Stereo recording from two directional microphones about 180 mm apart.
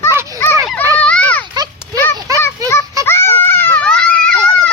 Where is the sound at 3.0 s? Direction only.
15° left (ahead or behind).